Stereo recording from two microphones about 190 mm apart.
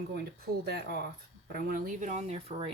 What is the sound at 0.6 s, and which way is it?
Speech, 55° right (ahead or behind).